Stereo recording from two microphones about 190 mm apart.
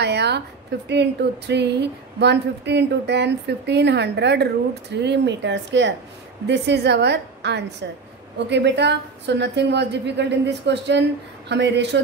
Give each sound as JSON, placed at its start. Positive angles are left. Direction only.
{"t": 0.0, "sound": "a woman's voice", "side_deg": -60}